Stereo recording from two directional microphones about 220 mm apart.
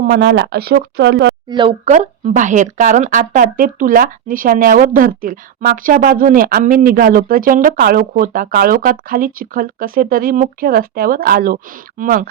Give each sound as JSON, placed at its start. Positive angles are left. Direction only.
{"t": 0.0, "sound": "speech", "side_deg": -50}
{"t": 1.5, "sound": "speech", "side_deg": -20}